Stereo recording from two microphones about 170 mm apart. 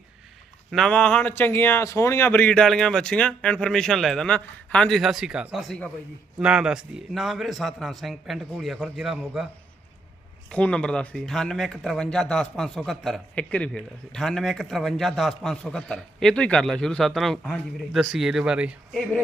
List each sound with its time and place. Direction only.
0.7 s speech: 5° left (ahead or behind)
10.5 s speech: 5° left (ahead or behind)